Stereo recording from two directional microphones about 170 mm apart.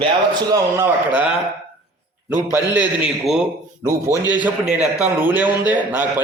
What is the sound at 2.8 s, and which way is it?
Speech, 5° right (ahead or behind).